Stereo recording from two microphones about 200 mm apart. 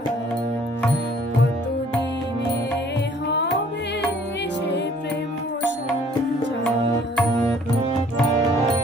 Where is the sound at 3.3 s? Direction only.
60° left (ahead or behind).